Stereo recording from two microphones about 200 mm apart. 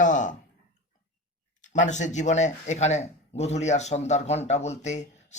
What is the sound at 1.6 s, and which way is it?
Speech, 35° left (ahead or behind).